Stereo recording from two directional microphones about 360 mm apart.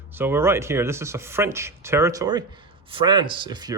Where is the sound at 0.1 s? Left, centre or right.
Centre.